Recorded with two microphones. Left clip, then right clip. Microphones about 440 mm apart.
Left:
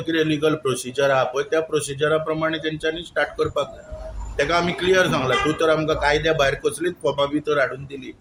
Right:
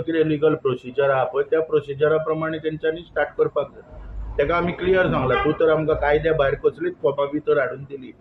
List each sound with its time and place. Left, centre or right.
0.1 s speech: right